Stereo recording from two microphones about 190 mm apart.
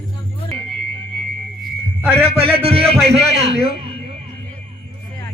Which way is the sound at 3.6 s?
30° right (ahead or behind).